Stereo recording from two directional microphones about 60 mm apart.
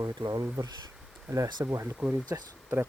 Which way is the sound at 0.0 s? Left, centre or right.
Right.